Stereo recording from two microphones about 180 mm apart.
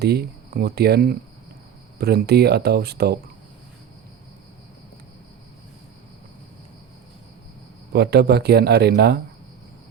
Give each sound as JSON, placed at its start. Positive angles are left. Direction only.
{"t": 0.0, "sound": "speech", "side_deg": -65}
{"t": 7.9, "sound": "speech", "side_deg": -65}